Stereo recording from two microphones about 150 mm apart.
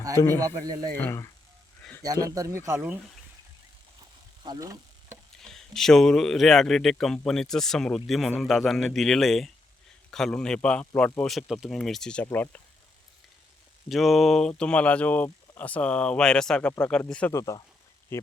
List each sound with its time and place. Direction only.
0.3 s speech: 25° right (ahead or behind)
0.9 s speech: 15° left (ahead or behind)
2.0 s speech: 25° right (ahead or behind)
4.4 s a sound: 25° right (ahead or behind)
5.4 s speech: 5° left (ahead or behind)
13.8 s speech: centre (ahead or behind)
17.3 s speech: 20° left (ahead or behind)